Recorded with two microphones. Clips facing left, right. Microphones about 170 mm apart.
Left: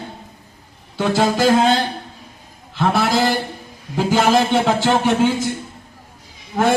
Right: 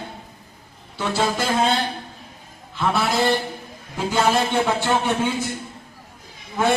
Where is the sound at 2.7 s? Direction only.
90° left.